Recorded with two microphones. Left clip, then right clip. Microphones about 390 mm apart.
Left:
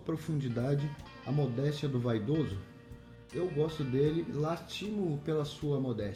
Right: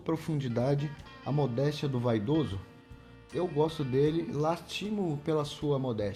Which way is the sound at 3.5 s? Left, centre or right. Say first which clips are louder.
Right 4 dB; right.